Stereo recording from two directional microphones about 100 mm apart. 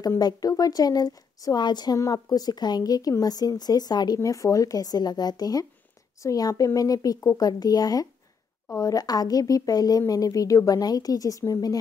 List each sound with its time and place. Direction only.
0.2 s a woman's voice: 40° left (ahead or behind)